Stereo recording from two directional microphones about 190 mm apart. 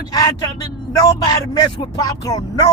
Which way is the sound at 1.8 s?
20° left (ahead or behind).